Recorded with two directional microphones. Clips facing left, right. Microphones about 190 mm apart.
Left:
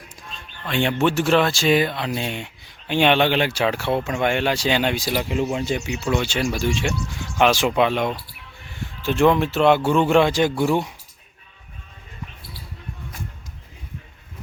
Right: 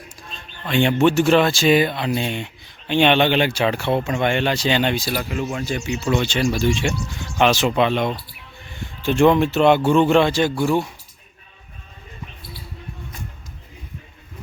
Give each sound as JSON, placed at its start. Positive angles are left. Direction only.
{"t": 0.6, "sound": "speech", "side_deg": 0}
{"t": 5.9, "sound": "speech", "side_deg": 5}